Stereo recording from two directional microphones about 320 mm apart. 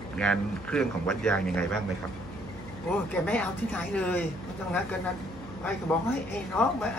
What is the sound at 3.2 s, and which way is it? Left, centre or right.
Speech, centre.